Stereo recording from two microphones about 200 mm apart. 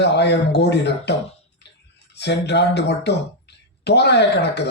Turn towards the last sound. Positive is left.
turn(degrees=55)  # may be behind; listen again after turning